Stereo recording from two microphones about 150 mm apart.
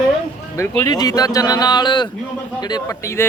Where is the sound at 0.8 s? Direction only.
25° left (ahead or behind).